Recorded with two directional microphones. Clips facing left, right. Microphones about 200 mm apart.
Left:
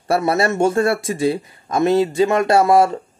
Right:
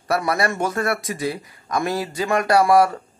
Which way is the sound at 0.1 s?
25° left (ahead or behind).